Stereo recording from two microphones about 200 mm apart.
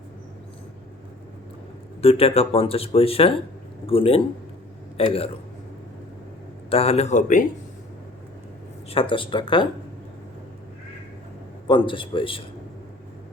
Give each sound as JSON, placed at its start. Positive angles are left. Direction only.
{"t": 2.0, "sound": "speech", "side_deg": 30}
{"t": 6.7, "sound": "speech", "side_deg": 30}
{"t": 8.9, "sound": "speech", "side_deg": 25}
{"t": 11.7, "sound": "speech", "side_deg": 25}